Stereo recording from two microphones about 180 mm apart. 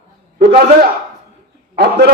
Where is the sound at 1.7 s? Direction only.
65° right (ahead or behind).